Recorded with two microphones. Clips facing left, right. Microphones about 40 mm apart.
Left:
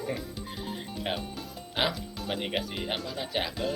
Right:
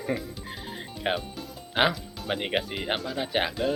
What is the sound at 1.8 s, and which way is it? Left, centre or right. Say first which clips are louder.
Speech: right 5 dB; right.